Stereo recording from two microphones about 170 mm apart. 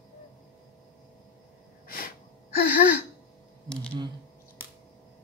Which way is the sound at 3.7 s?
5° left (ahead or behind).